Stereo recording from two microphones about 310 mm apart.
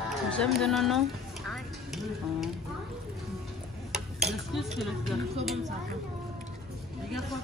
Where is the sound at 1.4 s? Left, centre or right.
Centre.